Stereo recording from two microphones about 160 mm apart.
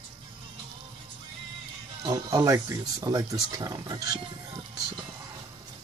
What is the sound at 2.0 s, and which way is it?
Speech, 25° right (ahead or behind).